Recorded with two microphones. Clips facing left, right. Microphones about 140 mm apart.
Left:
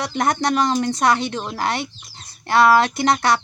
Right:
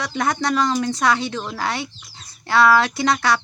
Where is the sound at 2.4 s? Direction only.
50° left (ahead or behind).